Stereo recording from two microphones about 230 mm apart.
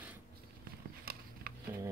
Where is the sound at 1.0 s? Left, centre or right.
Right.